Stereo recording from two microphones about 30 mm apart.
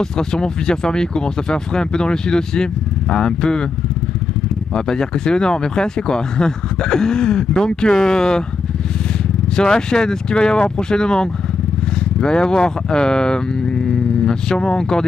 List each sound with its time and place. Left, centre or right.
0.0 s speech: left
4.9 s speech: left
9.6 s speech: left